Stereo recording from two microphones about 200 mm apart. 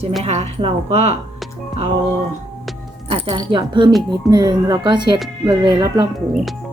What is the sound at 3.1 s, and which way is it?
Speech, 25° right (ahead or behind).